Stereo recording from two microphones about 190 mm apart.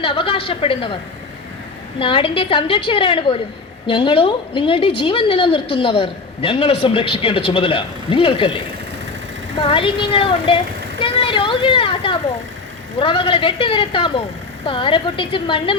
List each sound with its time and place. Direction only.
0.0 s a woman's voice: 30° left (ahead or behind)
2.0 s a woman's voice: 25° left (ahead or behind)